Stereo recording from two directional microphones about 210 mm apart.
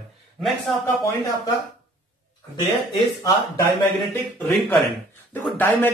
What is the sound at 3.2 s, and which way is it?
Speech, 15° left (ahead or behind).